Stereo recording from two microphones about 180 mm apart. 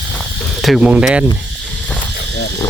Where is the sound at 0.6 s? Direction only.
5° right (ahead or behind).